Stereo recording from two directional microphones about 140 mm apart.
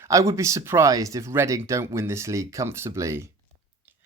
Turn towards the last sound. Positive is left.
turn(degrees=-20)  # may be behind; listen again after turning